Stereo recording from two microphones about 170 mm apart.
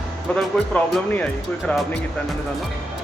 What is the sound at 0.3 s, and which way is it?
Speech, centre (ahead or behind).